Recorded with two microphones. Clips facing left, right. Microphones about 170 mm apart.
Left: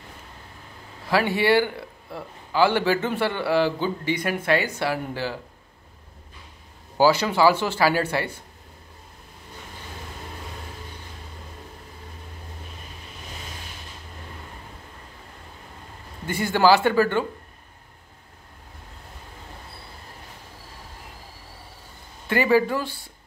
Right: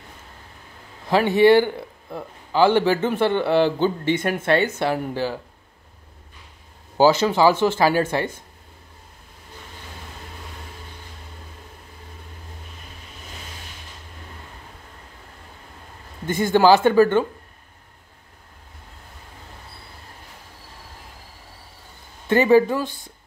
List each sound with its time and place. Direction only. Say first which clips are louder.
1.1 s a man's voice: right 5 dB; 20° right (ahead or behind)
7.0 s a man's voice: right 2 dB; 20° right (ahead or behind)
16.3 s a man's voice: right 3 dB; 20° right (ahead or behind)
22.3 s speech: right 4 dB; 20° right (ahead or behind)